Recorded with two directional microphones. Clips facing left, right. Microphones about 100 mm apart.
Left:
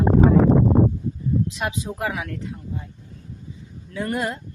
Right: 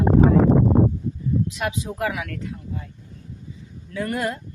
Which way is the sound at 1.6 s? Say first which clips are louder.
Right 1 dB; 25° left (ahead or behind).